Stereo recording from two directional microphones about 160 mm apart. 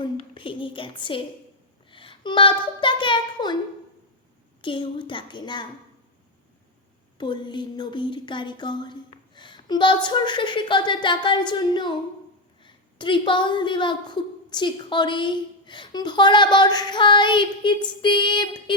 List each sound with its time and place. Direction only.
0.3 s a woman's voice: 30° left (ahead or behind)
4.6 s a woman's voice: 30° left (ahead or behind)
7.2 s a woman's voice: 30° left (ahead or behind)